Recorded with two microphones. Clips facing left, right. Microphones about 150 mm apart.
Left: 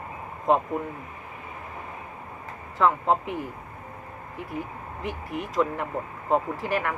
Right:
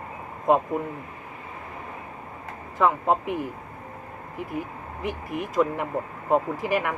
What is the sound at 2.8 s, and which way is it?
Speech, 10° right (ahead or behind).